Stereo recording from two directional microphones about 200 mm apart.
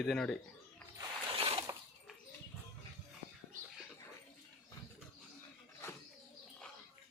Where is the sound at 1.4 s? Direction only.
30° right (ahead or behind).